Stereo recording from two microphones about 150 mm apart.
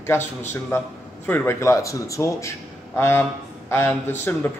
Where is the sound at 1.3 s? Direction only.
15° left (ahead or behind).